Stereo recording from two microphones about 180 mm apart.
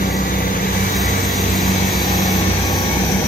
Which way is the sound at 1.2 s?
Centre (ahead or behind).